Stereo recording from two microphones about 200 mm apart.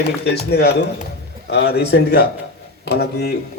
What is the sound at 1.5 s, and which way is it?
Speech, 60° left (ahead or behind).